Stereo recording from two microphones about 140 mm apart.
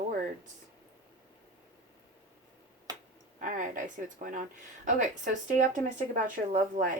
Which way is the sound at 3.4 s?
70° right (ahead or behind).